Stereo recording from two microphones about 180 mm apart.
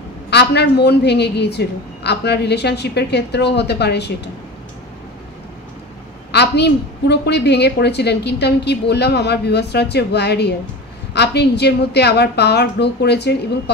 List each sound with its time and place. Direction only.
0.3 s a woman's voice: 65° left (ahead or behind)
6.3 s a woman's voice: 70° left (ahead or behind)